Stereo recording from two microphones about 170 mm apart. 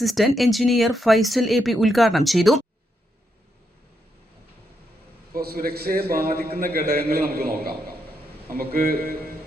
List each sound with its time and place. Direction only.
0.0 s speech: centre (ahead or behind)
5.3 s a man's voice: 60° right (ahead or behind)